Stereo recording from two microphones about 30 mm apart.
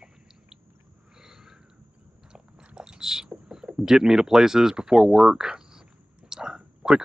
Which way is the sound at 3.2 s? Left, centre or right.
Right.